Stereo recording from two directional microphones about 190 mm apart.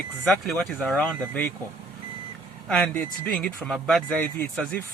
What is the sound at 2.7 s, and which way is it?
Speech, 5° left (ahead or behind).